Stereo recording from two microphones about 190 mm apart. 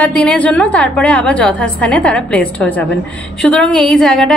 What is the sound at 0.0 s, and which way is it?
A woman's voice, 5° left (ahead or behind).